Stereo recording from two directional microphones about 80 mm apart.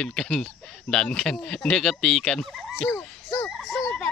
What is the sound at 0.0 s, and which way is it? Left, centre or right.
Speech, centre.